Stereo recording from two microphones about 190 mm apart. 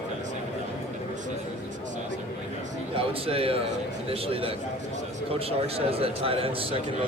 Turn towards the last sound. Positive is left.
turn(degrees=-30)  # may be behind; listen again after turning